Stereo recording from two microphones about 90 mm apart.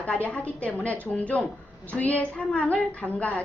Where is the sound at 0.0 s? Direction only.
15° left (ahead or behind).